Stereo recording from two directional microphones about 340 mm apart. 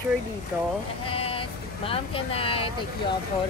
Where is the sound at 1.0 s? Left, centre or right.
Centre.